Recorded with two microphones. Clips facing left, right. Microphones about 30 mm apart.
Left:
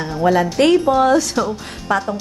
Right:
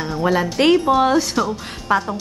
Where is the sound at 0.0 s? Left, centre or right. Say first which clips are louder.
Left 3 dB; centre.